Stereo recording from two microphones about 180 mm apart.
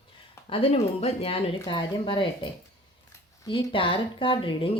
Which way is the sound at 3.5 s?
30° left (ahead or behind).